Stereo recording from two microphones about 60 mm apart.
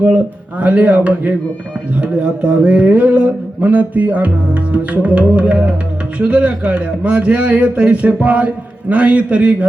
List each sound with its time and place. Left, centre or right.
0.6 s speech: right